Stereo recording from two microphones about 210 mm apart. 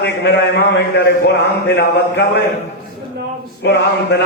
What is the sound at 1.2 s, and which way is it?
A man's voice, 55° left (ahead or behind).